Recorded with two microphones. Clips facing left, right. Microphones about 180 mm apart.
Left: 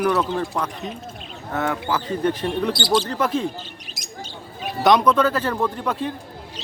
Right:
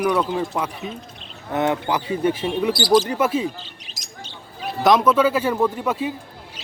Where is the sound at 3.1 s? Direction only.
5° right (ahead or behind).